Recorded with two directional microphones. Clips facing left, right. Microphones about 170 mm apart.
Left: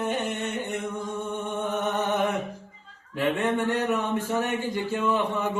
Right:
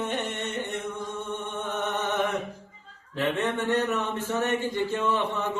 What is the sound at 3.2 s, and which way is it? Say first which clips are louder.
Speech: left 2 dB; 15° left (ahead or behind).